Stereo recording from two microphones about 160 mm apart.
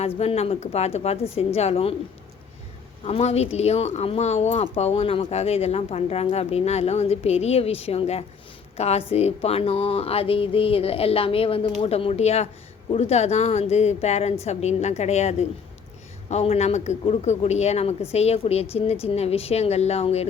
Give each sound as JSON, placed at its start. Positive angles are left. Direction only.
{"t": 0.0, "sound": "speech", "side_deg": 40}
{"t": 3.1, "sound": "a man's voice", "side_deg": 40}